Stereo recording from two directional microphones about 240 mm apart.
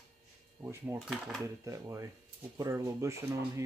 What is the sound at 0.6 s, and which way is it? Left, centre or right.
Speech, centre.